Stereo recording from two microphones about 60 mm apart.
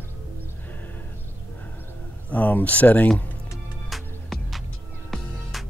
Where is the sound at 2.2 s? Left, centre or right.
Left.